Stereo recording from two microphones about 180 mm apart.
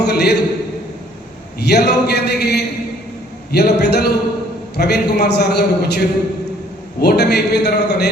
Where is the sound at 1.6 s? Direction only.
65° left (ahead or behind).